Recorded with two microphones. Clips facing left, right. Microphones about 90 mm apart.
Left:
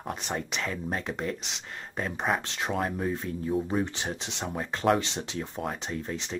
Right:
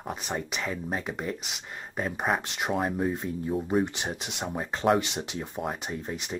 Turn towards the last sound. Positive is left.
turn(degrees=-10)  # may be behind; listen again after turning